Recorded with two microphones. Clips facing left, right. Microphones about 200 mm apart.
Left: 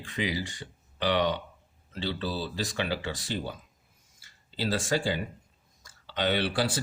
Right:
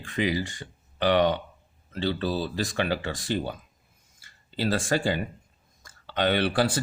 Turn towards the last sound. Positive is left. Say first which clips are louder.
# right 4 dB
turn(degrees=-50)  # may be behind; listen again after turning